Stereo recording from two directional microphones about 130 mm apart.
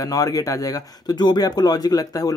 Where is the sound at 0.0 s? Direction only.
25° left (ahead or behind).